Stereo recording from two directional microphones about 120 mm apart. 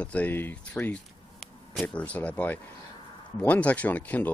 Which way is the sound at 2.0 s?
10° left (ahead or behind).